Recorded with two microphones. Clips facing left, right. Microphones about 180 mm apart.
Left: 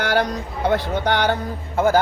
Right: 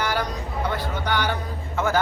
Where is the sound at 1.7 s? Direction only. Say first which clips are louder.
Left 6 dB; 35° left (ahead or behind).